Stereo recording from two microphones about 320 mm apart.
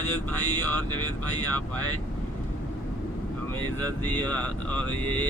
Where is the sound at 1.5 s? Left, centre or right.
Centre.